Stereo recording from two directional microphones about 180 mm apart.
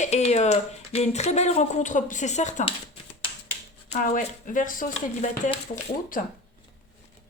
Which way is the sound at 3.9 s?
45° left (ahead or behind).